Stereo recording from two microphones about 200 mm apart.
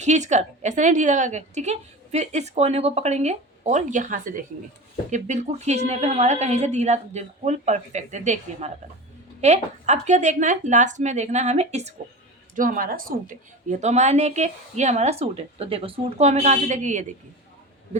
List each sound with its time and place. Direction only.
0.0 s a woman's voice: 35° right (ahead or behind)